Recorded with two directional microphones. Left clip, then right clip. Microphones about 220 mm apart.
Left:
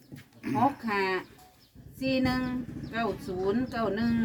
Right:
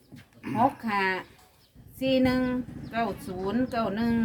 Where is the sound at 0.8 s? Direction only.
45° right (ahead or behind).